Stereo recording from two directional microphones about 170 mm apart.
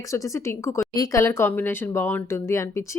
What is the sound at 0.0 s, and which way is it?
Speech, 20° left (ahead or behind).